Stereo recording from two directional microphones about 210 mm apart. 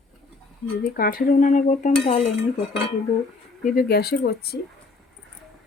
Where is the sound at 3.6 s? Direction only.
45° left (ahead or behind).